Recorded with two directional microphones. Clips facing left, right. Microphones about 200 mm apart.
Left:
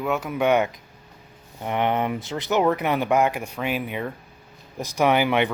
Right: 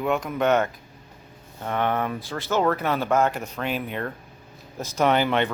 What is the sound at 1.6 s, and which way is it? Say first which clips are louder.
Speech: left 2 dB; 15° left (ahead or behind).